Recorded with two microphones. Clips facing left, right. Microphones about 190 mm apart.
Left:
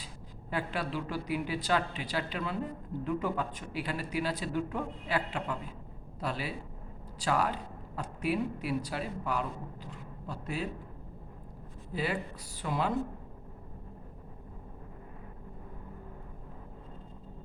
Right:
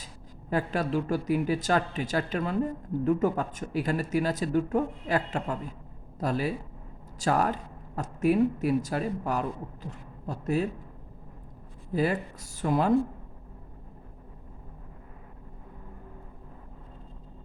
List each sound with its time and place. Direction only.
0.5 s speech: 45° right (ahead or behind)
11.9 s speech: 45° right (ahead or behind)